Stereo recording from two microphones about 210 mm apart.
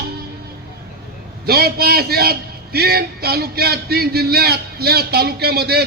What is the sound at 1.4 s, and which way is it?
A man's voice, 50° right (ahead or behind).